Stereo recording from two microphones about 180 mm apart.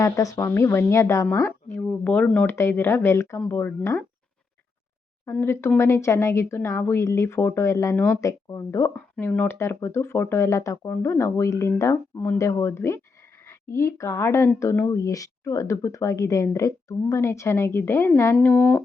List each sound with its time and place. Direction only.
0.0 s speech: 20° left (ahead or behind)
5.2 s speech: 15° left (ahead or behind)